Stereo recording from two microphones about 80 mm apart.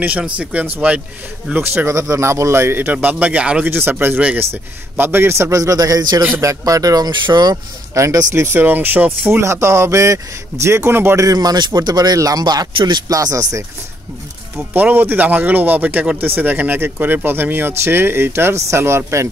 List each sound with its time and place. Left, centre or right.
0.2 s speech: centre
3.6 s a man's voice: right
6.4 s speech: right
7.1 s speech: right
7.9 s speech: right
9.4 s a man's voice: right
11.2 s speech: right
12.7 s speech: right
13.1 s speech: right
14.7 s speech: right